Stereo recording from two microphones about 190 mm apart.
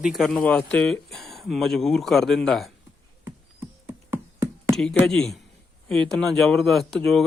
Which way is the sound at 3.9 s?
10° right (ahead or behind).